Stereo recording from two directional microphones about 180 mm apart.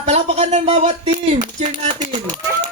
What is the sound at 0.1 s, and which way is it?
Speech, 40° right (ahead or behind).